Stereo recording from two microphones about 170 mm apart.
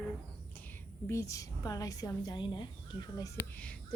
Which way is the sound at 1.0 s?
15° left (ahead or behind).